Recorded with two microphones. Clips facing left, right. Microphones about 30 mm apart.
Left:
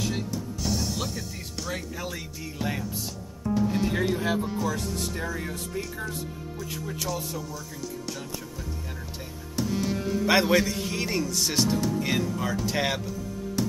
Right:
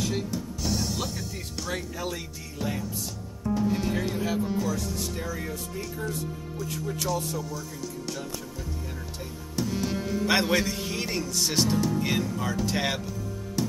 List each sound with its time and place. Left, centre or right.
0.3 s music: centre
1.6 s speech: centre
3.4 s music: centre
4.2 s speech: left
6.6 s speech: centre
9.6 s speech: centre
13.6 s music: centre